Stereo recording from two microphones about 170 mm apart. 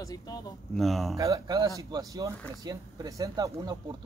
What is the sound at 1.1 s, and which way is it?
Speech, 20° right (ahead or behind).